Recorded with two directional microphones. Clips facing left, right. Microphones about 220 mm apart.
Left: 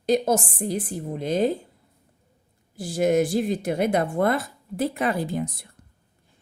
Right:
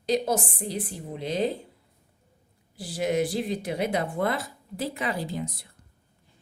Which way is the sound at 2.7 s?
45° left (ahead or behind).